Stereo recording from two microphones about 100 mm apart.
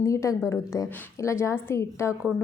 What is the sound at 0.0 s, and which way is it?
A woman's voice, 30° left (ahead or behind).